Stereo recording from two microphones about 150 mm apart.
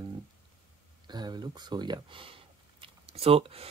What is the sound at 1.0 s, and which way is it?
Speech, 30° right (ahead or behind).